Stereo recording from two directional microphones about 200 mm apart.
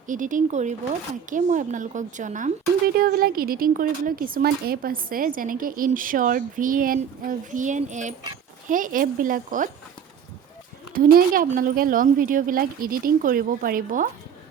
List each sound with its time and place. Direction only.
0.1 s a woman's voice: 40° right (ahead or behind)
10.9 s a woman's voice: 45° right (ahead or behind)